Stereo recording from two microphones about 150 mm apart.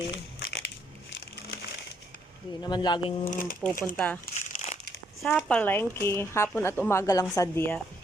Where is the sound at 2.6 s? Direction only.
30° left (ahead or behind).